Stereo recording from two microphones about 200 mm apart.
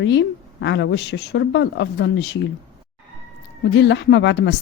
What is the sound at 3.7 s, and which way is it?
Speech, 65° left (ahead or behind).